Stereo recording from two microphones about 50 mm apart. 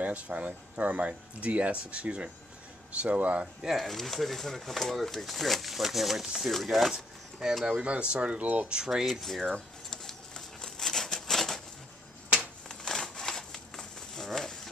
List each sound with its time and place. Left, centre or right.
0.0 s speech: right
3.6 s speech: centre
7.6 s speech: right
8.6 s speech: centre
9.2 s a sound: centre
12.6 s a sound: centre